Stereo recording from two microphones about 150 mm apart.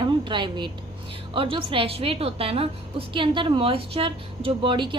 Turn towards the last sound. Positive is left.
turn(degrees=-35)  # may be behind; listen again after turning